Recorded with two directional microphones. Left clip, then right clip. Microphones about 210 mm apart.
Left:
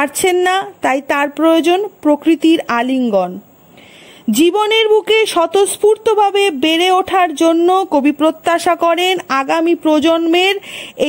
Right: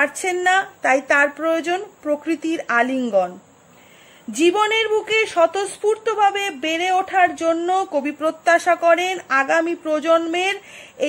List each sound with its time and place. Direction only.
0.0 s speech: 35° left (ahead or behind)
3.0 s speech: 25° left (ahead or behind)
4.4 s speech: 40° left (ahead or behind)